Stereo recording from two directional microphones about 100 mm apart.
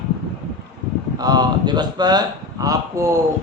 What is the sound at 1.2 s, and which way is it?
A man's voice, 40° right (ahead or behind).